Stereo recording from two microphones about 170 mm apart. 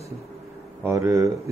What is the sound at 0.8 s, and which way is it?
Speech, 15° right (ahead or behind).